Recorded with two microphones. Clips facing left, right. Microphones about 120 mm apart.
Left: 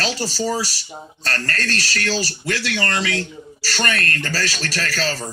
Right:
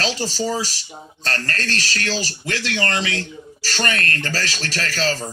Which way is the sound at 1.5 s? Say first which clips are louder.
Left 1 dB; 15° right (ahead or behind).